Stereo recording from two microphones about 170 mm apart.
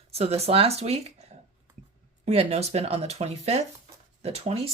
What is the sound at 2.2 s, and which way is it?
Speech, 40° right (ahead or behind).